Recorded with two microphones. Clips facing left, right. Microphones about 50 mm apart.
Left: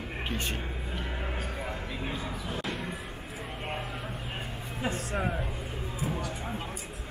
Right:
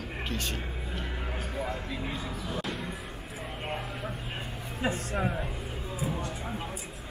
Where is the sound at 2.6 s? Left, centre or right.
Centre.